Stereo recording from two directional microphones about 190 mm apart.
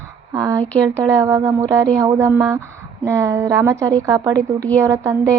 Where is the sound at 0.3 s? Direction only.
15° right (ahead or behind).